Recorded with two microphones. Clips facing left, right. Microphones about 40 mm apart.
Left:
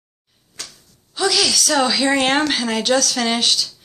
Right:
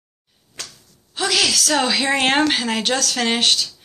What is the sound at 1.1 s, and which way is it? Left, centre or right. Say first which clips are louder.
A woman's voice: left 1 dB; right.